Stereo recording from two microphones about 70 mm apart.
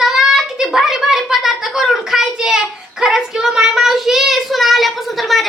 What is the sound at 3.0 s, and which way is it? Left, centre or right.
Child singing, centre.